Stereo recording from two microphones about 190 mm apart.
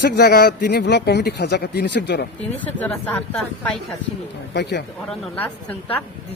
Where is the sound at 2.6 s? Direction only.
10° left (ahead or behind).